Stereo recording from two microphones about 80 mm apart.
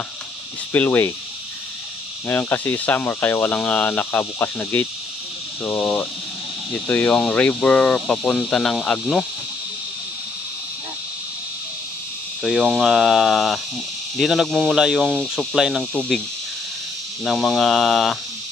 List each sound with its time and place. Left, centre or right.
0.7 s speech: left
2.2 s speech: left; by 9.0 s centre
12.4 s speech: centre
17.2 s speech: centre